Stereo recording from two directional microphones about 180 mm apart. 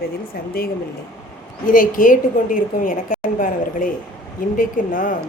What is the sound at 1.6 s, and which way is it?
A woman's voice, 50° left (ahead or behind).